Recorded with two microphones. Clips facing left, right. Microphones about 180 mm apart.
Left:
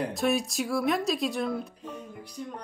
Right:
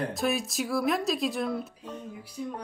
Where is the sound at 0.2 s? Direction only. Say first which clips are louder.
Left 3 dB; centre (ahead or behind).